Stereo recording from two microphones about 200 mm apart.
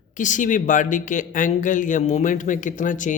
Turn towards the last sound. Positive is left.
turn(degrees=40)  # may be behind; listen again after turning